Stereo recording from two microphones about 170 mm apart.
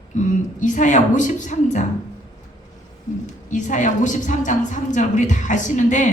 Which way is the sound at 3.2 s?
45° left (ahead or behind).